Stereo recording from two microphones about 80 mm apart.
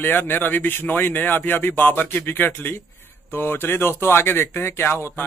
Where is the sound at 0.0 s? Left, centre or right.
Left.